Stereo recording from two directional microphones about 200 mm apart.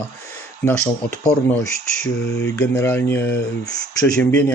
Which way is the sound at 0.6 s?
5° left (ahead or behind).